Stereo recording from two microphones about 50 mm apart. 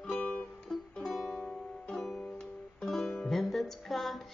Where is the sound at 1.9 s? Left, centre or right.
Centre.